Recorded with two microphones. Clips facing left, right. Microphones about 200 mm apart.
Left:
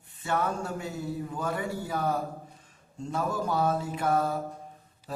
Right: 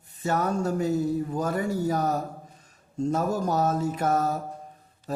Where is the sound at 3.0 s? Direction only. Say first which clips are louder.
Right 5 dB; 40° right (ahead or behind).